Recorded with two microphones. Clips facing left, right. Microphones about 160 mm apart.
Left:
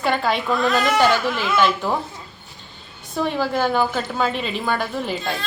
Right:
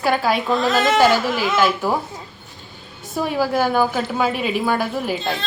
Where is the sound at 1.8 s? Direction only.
10° right (ahead or behind).